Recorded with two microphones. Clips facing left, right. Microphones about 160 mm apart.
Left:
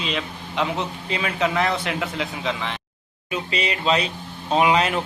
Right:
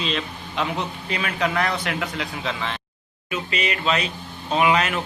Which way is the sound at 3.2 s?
30° left (ahead or behind).